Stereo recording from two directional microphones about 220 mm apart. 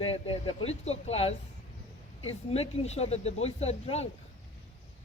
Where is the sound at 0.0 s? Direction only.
25° left (ahead or behind).